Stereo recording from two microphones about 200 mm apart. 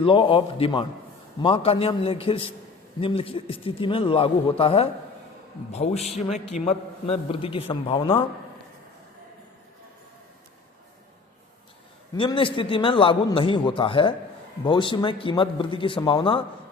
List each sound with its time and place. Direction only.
0.0 s a man's voice: 25° left (ahead or behind)
12.1 s a man's voice: 25° left (ahead or behind)